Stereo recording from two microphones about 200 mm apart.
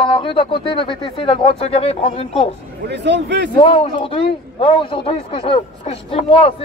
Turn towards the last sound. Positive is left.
turn(degrees=30)  # may be behind; listen again after turning